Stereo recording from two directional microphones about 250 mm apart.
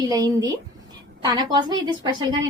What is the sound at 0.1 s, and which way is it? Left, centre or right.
A woman's voice, centre.